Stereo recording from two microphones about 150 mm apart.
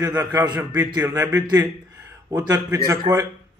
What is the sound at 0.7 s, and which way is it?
Speech, 15° right (ahead or behind).